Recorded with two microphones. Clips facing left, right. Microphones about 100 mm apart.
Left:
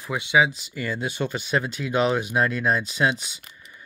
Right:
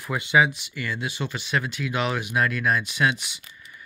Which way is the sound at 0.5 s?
35° left (ahead or behind).